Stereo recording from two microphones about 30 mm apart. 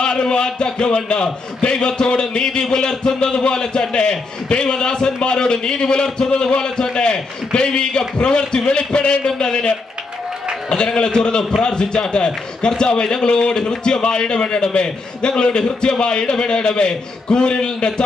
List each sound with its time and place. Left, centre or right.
0.0 s a man's voice: left
11.0 s a man's voice: left